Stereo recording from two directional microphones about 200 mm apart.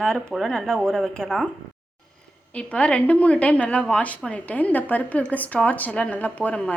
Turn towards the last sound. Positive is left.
turn(degrees=5)  # may be behind; listen again after turning